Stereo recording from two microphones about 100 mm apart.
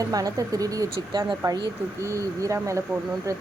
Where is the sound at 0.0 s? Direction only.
35° right (ahead or behind).